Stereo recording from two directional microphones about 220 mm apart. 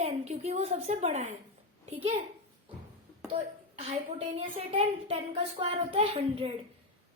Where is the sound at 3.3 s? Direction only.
25° right (ahead or behind).